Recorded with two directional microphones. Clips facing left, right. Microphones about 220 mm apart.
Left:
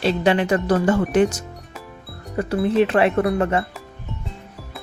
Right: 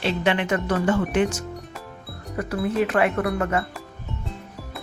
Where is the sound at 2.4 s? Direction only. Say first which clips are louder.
Left 5 dB; 30° left (ahead or behind).